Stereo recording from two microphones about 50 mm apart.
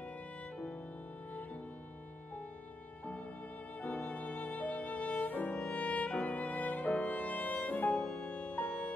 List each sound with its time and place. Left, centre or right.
3.8 s violin: left
5.7 s music: left
7.9 s music: centre
8.3 s music: left